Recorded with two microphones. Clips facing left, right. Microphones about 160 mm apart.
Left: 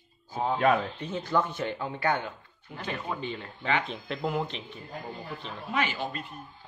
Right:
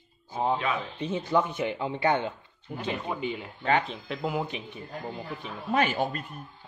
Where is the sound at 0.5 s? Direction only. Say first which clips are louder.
Left 6 dB; 50° left (ahead or behind).